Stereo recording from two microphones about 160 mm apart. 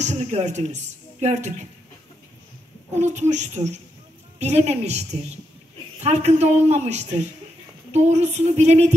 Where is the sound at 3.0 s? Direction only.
45° right (ahead or behind).